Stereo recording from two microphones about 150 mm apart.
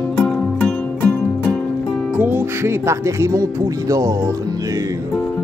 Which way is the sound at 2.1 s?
15° right (ahead or behind).